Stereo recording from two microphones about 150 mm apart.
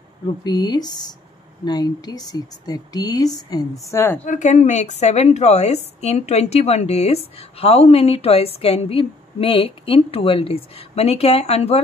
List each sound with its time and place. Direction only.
0.4 s a woman's voice: 25° left (ahead or behind)
4.2 s a woman's voice: 55° left (ahead or behind)